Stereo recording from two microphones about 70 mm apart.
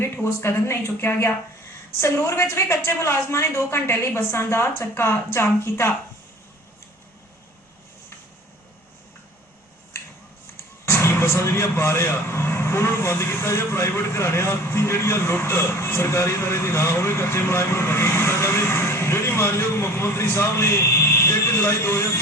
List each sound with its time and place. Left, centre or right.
0.0 s speech: left
10.8 s speech: left